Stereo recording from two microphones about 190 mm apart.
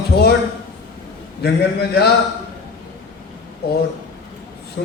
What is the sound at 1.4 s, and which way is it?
Speech, 55° left (ahead or behind).